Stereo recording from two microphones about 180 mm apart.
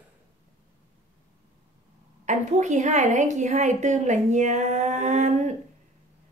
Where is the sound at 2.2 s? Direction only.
40° right (ahead or behind).